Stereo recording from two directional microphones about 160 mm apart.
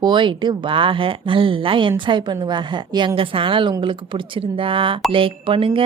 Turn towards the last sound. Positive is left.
turn(degrees=-35)  # may be behind; listen again after turning